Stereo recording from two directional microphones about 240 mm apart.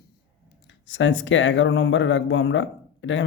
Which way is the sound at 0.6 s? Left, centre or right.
Left.